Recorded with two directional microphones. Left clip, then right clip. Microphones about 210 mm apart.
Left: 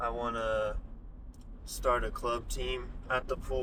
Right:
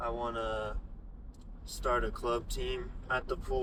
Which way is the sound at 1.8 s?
25° left (ahead or behind).